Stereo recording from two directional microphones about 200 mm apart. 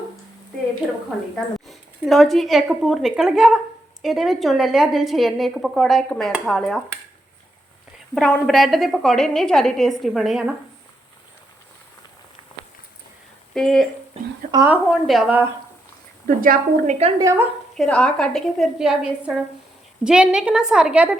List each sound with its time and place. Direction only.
1.6 s a woman's voice: centre (ahead or behind)
8.1 s a woman's voice: centre (ahead or behind)
13.5 s speech: centre (ahead or behind)
14.5 s speech: 15° right (ahead or behind)
15.0 s a woman's voice: centre (ahead or behind)
16.2 s a woman's voice: 45° right (ahead or behind)
17.2 s speech: 15° right (ahead or behind)
17.7 s a woman's voice: 5° left (ahead or behind)